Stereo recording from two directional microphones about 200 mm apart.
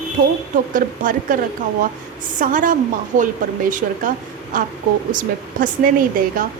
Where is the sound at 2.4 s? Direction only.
40° right (ahead or behind).